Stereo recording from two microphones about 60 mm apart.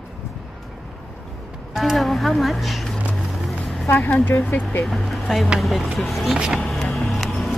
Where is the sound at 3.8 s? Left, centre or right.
Left.